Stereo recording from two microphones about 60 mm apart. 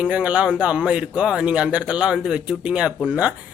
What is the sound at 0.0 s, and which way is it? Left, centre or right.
Speech, right.